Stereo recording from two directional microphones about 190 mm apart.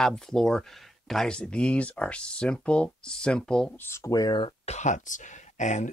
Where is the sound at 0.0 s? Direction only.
5° left (ahead or behind).